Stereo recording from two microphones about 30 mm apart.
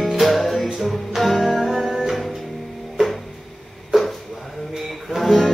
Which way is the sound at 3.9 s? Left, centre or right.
Centre.